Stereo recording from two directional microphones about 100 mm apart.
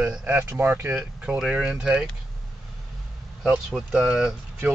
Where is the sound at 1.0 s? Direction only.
5° right (ahead or behind).